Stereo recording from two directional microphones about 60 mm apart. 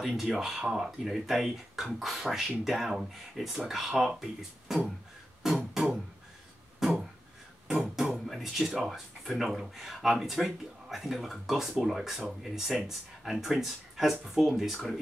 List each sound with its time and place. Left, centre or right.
0.2 s speech: centre
5.4 s music: centre
6.8 s a sound: centre
7.6 s music: centre
8.8 s speech: centre